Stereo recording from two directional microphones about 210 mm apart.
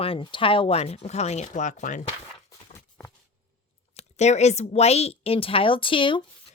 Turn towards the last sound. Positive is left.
turn(degrees=25)  # may be behind; listen again after turning